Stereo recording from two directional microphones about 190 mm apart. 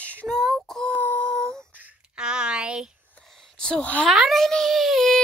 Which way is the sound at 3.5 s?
5° left (ahead or behind).